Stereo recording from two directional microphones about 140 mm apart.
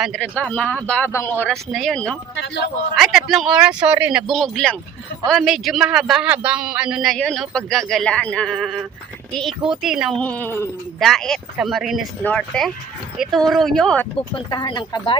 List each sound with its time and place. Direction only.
0.2 s speech: 10° left (ahead or behind)
1.7 s a man's voice: 5° left (ahead or behind)
4.3 s a man's voice: 5° left (ahead or behind)
10.2 s speech: 10° left (ahead or behind)
11.0 s a man's voice: 5° left (ahead or behind)
14.2 s speech: 35° left (ahead or behind)